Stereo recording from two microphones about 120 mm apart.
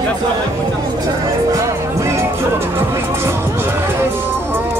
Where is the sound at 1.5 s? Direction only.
25° right (ahead or behind).